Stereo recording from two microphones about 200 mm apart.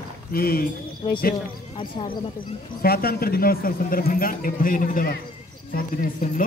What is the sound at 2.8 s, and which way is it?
A man's voice, 50° left (ahead or behind).